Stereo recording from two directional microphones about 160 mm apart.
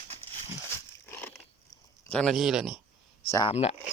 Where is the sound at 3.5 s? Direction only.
40° left (ahead or behind).